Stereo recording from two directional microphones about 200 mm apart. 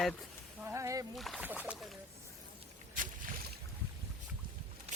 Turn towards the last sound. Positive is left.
turn(degrees=-30)  # may be behind; listen again after turning